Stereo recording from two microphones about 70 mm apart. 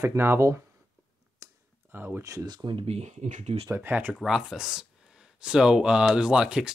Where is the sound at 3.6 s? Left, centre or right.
Right.